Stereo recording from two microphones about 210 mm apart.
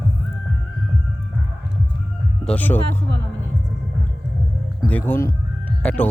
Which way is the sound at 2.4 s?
5° left (ahead or behind).